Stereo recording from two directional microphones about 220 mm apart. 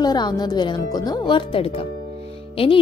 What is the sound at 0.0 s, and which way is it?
Speech, 20° left (ahead or behind).